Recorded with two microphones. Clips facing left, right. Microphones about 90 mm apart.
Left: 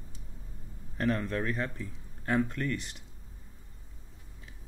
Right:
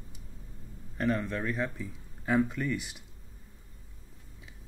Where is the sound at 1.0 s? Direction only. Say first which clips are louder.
Even; centre (ahead or behind).